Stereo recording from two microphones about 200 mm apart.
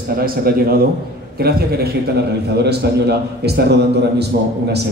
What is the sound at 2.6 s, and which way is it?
A man's voice, 55° right (ahead or behind).